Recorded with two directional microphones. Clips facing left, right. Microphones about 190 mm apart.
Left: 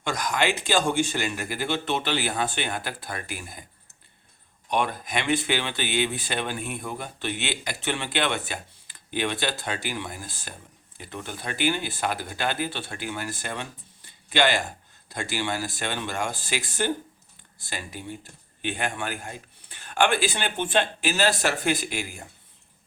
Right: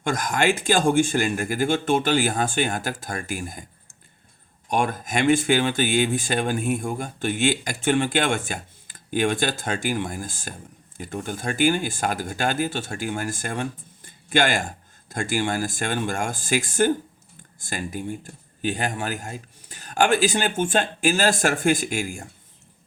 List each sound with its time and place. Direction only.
0.0 s speech: 50° right (ahead or behind)
4.7 s speech: 45° right (ahead or behind)